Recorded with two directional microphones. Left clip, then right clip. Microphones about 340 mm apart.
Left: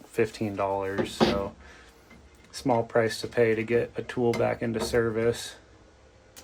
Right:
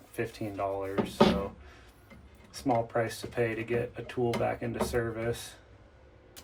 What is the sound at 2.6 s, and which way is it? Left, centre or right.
Speech, left.